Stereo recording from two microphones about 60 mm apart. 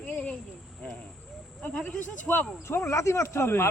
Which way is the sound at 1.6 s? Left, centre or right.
Left.